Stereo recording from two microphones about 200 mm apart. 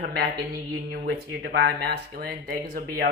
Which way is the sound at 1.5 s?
55° right (ahead or behind).